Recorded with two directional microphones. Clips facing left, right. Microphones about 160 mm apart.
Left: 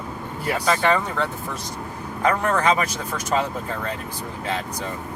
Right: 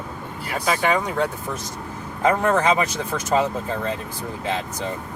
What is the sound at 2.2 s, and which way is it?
Speech, 25° right (ahead or behind).